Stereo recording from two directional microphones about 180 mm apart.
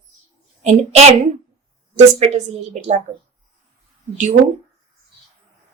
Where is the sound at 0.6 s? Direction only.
40° right (ahead or behind).